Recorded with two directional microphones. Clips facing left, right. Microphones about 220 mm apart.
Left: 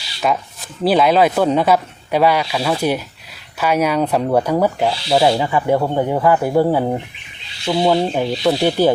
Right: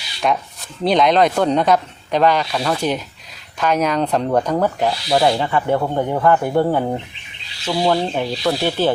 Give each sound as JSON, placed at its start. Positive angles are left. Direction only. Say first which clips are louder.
{"t": 0.2, "sound": "speech", "louder": "left 1 dB", "side_deg": 0}